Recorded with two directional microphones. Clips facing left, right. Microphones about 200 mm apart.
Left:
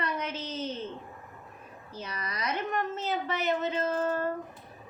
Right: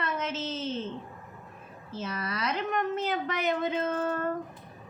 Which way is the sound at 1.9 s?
15° left (ahead or behind).